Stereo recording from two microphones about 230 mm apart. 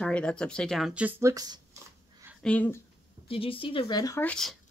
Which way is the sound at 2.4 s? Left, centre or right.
Centre.